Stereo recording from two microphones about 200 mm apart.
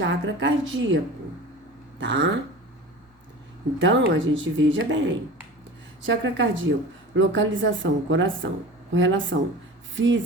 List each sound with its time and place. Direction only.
0.0 s speech: 65° right (ahead or behind)
2.0 s speech: 65° right (ahead or behind)
3.8 s speech: 65° right (ahead or behind)